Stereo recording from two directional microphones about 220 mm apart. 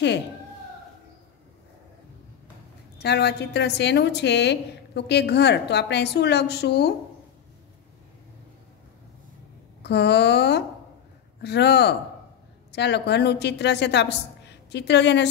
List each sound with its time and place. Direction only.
3.0 s a woman's voice: 50° left (ahead or behind)
9.8 s a woman's voice: 50° left (ahead or behind)